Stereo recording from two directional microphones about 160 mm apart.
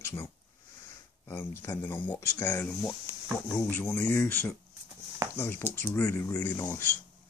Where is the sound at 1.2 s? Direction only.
10° left (ahead or behind).